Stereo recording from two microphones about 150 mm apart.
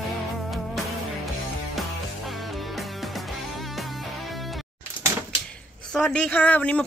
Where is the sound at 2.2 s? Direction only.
Centre (ahead or behind).